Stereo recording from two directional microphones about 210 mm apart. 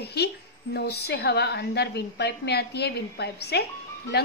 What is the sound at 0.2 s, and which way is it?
Speech, 50° left (ahead or behind).